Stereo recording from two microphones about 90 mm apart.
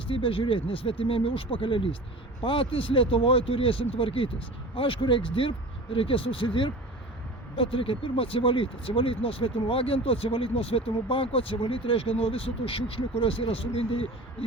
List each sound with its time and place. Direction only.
0.1 s speech: 85° left
7.5 s speech: 90° left